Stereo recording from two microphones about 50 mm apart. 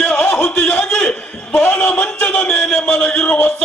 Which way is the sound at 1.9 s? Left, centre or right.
Left.